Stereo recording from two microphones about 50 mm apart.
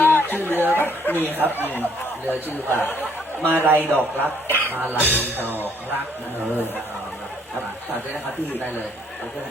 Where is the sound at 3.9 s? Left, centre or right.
Left.